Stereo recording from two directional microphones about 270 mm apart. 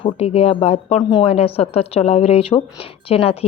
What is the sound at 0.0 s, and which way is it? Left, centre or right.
Speech, left.